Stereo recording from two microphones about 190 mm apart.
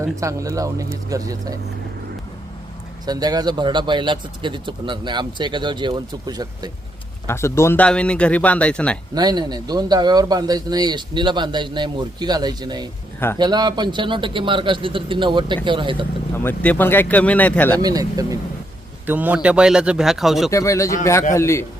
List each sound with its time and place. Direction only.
0.0 s speech: 15° right (ahead or behind)
3.1 s a man's voice: 20° right (ahead or behind)
7.3 s speech: 15° left (ahead or behind)
9.1 s a man's voice: 20° right (ahead or behind)
13.1 s speech: 10° left (ahead or behind)
13.4 s a man's voice: 20° right (ahead or behind)
16.3 s speech: 10° left (ahead or behind)
17.8 s a man's voice: 20° right (ahead or behind); by 20.5 s centre (ahead or behind)
20.5 s speech: 15° left (ahead or behind)